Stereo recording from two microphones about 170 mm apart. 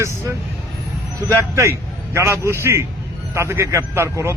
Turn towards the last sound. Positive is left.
turn(degrees=-15)  # may be behind; listen again after turning